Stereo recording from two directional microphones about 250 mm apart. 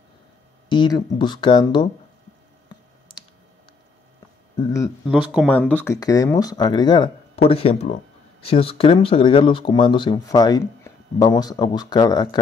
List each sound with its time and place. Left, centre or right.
0.7 s speech: centre
4.6 s speech: centre
5.0 s speech: centre